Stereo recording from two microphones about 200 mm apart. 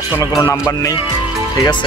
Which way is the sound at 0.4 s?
15° left (ahead or behind).